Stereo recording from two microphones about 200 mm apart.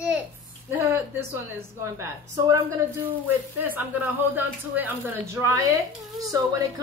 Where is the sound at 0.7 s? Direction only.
10° right (ahead or behind).